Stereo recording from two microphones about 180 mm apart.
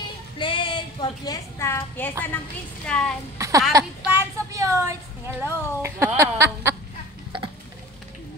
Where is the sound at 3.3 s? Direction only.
15° right (ahead or behind).